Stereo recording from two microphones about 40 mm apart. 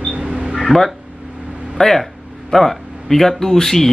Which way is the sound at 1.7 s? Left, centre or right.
Centre.